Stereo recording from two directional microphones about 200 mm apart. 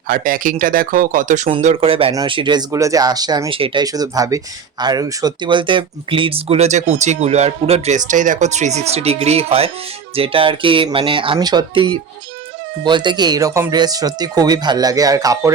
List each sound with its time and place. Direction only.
0.1 s speech: 45° right (ahead or behind); by 15.5 s 15° right (ahead or behind)